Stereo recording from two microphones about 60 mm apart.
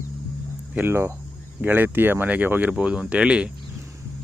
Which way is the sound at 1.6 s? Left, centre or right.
Right.